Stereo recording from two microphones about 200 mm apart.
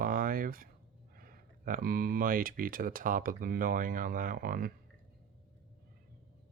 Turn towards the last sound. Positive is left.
turn(degrees=-45)  # may be behind; listen again after turning